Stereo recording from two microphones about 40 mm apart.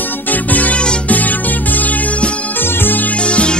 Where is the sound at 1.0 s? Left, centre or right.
Left.